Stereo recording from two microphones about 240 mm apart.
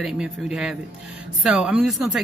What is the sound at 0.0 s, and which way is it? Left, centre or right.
Speech, centre.